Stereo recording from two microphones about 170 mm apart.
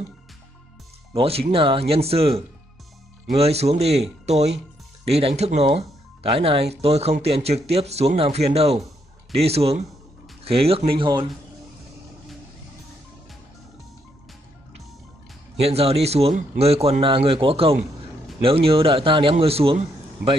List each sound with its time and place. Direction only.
1.1 s speech: 35° right (ahead or behind)
15.6 s speech: 35° right (ahead or behind)